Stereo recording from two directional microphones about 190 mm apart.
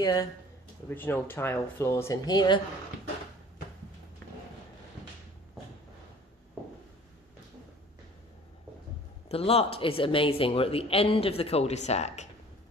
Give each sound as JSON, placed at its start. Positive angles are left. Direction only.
{"t": 0.0, "sound": "speech", "side_deg": 20}
{"t": 9.3, "sound": "speech", "side_deg": 30}